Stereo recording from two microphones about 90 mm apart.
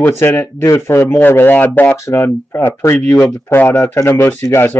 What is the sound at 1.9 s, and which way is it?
Speech, 35° left (ahead or behind).